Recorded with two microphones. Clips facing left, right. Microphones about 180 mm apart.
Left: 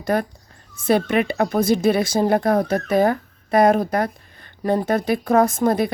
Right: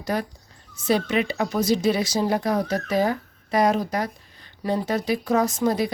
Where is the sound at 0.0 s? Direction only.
55° left (ahead or behind).